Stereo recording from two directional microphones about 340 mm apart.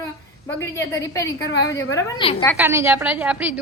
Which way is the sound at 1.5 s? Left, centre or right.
Left.